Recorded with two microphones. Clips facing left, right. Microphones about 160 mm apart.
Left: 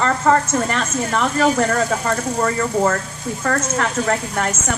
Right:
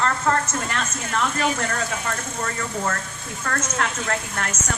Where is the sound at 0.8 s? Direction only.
60° left (ahead or behind).